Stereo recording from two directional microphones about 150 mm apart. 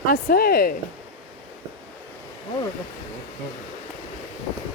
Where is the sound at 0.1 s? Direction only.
85° left.